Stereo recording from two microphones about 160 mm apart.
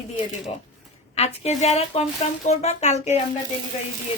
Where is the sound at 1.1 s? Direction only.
40° left (ahead or behind).